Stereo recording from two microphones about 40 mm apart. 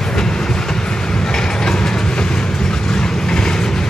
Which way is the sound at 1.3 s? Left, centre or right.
Centre.